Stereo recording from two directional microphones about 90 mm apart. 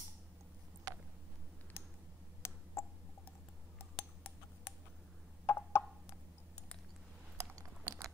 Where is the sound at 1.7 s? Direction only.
25° left (ahead or behind).